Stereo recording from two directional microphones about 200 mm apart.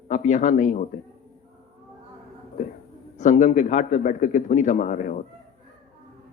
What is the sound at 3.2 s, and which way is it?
A man's voice, 40° left (ahead or behind).